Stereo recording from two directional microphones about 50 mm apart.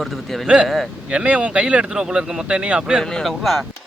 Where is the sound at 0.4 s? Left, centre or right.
Right.